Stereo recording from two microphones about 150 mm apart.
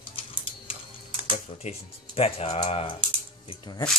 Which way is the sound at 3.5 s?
30° left (ahead or behind).